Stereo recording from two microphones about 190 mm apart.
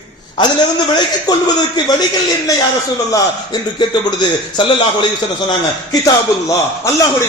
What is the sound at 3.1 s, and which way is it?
A man's voice, 20° left (ahead or behind).